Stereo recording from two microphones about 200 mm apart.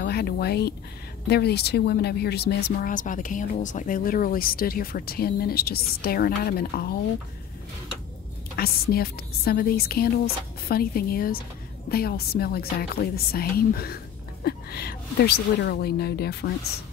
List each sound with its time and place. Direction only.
0.0 s speech: 55° left (ahead or behind)
8.5 s speech: 50° left (ahead or behind)